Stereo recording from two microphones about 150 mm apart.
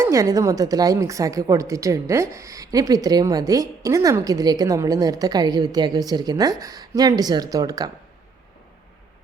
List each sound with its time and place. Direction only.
0.0 s a woman's voice: 20° right (ahead or behind)